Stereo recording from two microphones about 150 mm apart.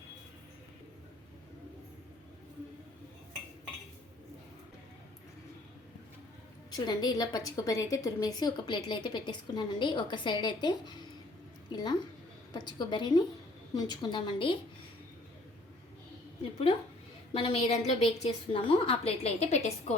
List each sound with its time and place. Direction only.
6.7 s a woman's voice: 30° left (ahead or behind)
17.3 s a woman's voice: 40° left (ahead or behind)